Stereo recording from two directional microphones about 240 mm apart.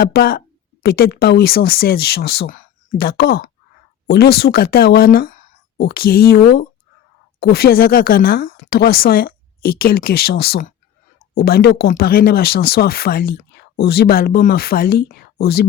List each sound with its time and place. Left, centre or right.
0.0 s a woman's voice: left